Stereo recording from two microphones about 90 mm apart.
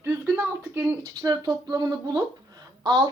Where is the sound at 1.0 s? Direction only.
45° right (ahead or behind).